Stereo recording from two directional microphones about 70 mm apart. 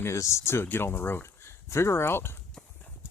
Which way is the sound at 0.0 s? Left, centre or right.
Left.